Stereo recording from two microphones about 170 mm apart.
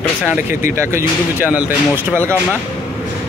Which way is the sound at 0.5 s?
50° left (ahead or behind).